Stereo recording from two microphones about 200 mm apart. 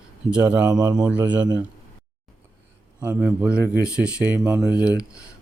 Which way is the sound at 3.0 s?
10° right (ahead or behind).